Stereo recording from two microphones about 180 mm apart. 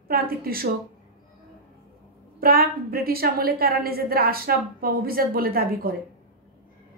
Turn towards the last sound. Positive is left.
turn(degrees=-55)  # may be behind; listen again after turning